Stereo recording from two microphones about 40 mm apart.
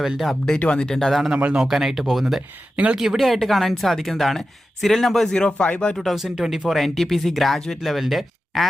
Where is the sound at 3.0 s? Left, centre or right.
Centre.